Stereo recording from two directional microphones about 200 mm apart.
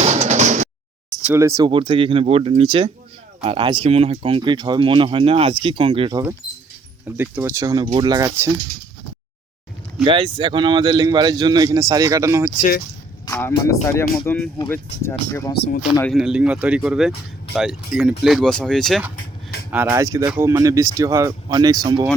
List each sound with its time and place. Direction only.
0.0 s music: 35° right (ahead or behind)
1.3 s speech: 15° right (ahead or behind)
7.2 s speech: 10° right (ahead or behind)
10.0 s speech: 25° right (ahead or behind)
13.2 s speech: 15° left (ahead or behind)
15.5 s speech: 55° left (ahead or behind)
16.0 s speech: 5° right (ahead or behind)
19.7 s speech: 10° right (ahead or behind)